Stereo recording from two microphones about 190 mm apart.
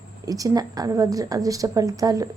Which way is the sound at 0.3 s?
20° right (ahead or behind).